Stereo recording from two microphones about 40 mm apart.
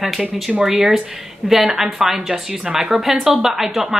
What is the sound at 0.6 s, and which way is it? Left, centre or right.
Speech, centre.